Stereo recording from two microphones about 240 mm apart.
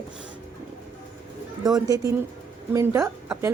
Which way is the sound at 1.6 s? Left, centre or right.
Centre.